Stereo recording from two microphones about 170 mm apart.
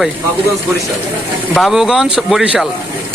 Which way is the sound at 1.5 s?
Centre (ahead or behind).